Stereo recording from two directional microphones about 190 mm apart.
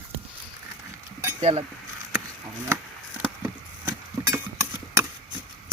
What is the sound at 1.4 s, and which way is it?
Speech, 30° right (ahead or behind).